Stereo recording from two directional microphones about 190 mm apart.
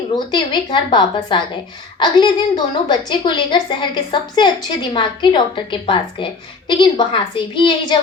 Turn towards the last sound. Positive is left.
turn(degrees=25)  # may be behind; listen again after turning